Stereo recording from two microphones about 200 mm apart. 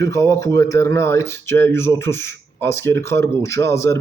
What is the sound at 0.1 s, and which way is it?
Speech, 15° left (ahead or behind).